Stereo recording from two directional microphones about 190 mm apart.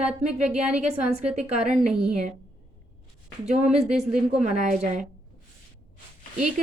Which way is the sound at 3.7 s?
5° right (ahead or behind).